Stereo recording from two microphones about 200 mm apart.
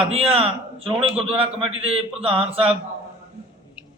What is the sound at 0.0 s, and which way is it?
A man's voice, 30° right (ahead or behind).